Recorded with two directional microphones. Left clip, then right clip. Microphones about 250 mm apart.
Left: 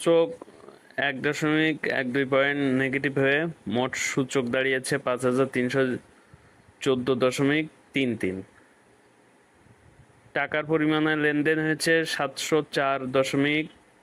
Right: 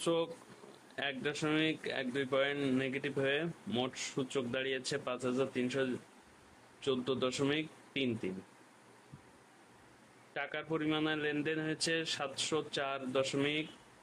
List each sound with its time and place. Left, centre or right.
0.0 s speech: left
10.3 s speech: left